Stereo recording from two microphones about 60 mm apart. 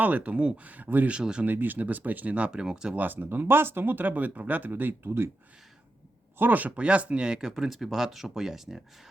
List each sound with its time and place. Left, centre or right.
0.0 s speech: right
1.1 s speech: centre
1.5 s speech: right; by 2.9 s centre
2.9 s speech: right
6.4 s speech: right; by 8.8 s centre